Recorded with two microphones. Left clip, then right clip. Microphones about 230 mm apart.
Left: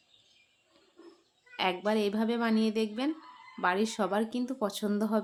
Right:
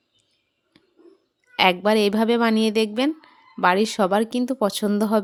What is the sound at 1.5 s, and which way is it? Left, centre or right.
Speech, right.